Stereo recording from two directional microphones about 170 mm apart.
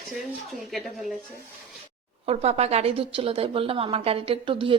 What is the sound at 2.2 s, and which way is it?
A woman's voice, 35° right (ahead or behind).